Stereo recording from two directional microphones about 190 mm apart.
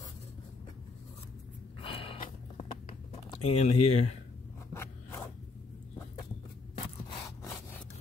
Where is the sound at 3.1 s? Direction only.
35° left (ahead or behind).